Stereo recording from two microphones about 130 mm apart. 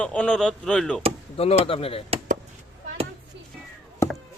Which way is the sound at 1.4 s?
50° left (ahead or behind).